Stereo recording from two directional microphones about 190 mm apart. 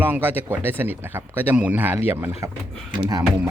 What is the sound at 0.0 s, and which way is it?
Speech, 10° right (ahead or behind).